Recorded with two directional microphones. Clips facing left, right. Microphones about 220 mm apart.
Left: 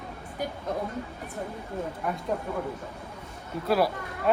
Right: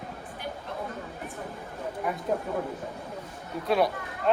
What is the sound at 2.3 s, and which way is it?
Speech, 5° right (ahead or behind).